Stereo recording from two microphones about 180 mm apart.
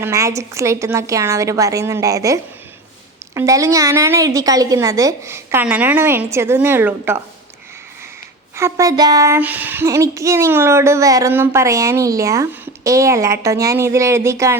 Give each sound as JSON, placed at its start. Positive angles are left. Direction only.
{"t": 0.0, "sound": "female singing", "side_deg": -15}
{"t": 8.5, "sound": "female singing", "side_deg": -15}